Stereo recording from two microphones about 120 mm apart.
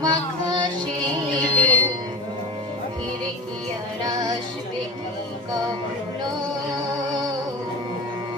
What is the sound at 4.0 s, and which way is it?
Music, 30° right (ahead or behind).